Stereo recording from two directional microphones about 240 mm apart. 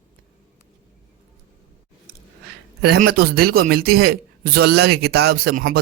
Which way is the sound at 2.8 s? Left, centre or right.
Right.